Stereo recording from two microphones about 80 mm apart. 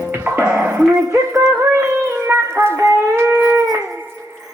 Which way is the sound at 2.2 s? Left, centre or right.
Right.